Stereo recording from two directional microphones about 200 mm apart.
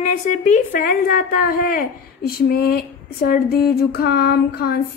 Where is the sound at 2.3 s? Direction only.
50° left (ahead or behind).